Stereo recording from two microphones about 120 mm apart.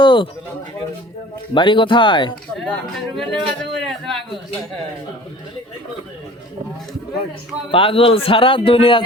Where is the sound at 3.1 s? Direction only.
Centre (ahead or behind).